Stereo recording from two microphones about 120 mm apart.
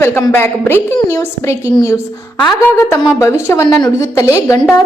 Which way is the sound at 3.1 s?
20° left (ahead or behind).